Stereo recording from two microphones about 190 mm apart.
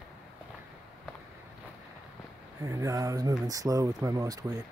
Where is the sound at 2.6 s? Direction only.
15° right (ahead or behind).